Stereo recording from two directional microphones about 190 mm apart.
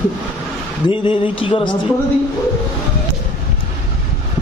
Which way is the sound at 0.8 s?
25° left (ahead or behind).